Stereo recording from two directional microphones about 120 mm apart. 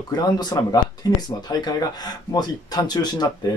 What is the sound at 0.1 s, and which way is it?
Speech, 35° left (ahead or behind).